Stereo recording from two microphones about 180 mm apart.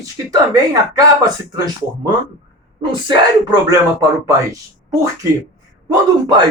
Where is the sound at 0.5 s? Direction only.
20° right (ahead or behind).